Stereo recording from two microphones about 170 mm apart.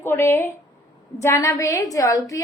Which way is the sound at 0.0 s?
15° left (ahead or behind).